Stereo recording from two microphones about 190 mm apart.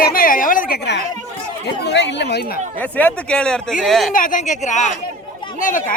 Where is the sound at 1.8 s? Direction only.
65° left (ahead or behind).